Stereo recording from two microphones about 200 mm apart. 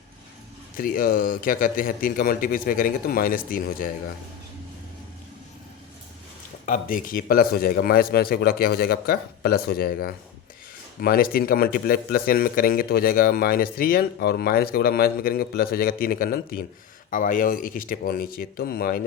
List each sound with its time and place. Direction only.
0.8 s a man's voice: 45° left (ahead or behind)
6.7 s a man's voice: 45° left (ahead or behind)